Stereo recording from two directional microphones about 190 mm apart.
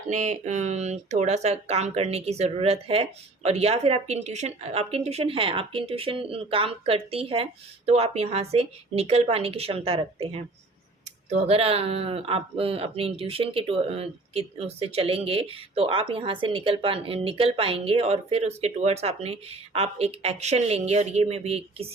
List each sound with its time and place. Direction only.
0.1 s speech: 40° right (ahead or behind)